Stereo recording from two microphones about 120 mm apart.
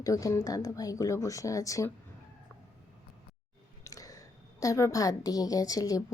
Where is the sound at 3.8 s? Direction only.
30° left (ahead or behind).